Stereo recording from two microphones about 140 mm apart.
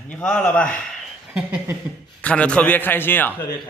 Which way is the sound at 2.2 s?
10° left (ahead or behind).